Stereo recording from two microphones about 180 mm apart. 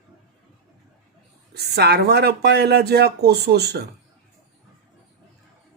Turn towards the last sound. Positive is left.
turn(degrees=-65)  # may be behind; listen again after turning